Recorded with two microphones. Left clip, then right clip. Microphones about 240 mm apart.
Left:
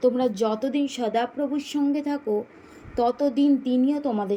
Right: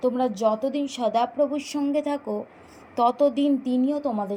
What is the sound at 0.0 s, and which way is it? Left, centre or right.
A woman's voice, centre.